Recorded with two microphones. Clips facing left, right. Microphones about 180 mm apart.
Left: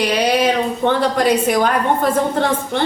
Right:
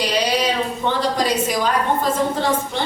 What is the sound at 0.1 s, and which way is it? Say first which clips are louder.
A woman's voice: left 4 dB; 55° left (ahead or behind).